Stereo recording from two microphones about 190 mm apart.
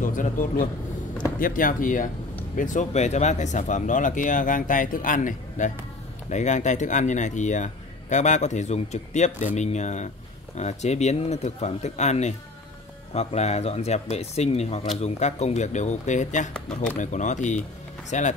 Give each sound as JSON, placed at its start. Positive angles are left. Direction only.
{"t": 0.0, "sound": "speech", "side_deg": 45}
{"t": 16.5, "sound": "speech", "side_deg": 5}
{"t": 17.0, "sound": "speech", "side_deg": 40}